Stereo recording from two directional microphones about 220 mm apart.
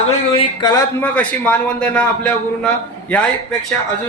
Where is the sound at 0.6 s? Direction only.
15° left (ahead or behind).